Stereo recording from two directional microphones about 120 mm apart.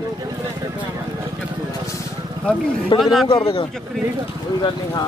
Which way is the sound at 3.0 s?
Centre (ahead or behind).